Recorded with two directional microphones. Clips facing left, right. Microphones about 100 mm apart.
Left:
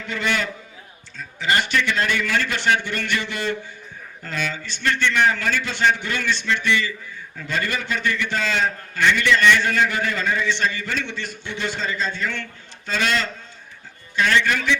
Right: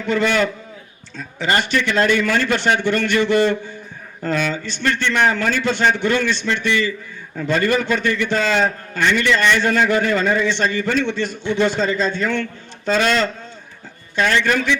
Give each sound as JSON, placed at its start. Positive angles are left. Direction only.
{"t": 0.1, "sound": "a man's voice", "side_deg": -40}